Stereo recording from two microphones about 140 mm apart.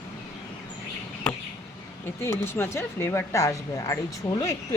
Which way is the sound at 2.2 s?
15° left (ahead or behind).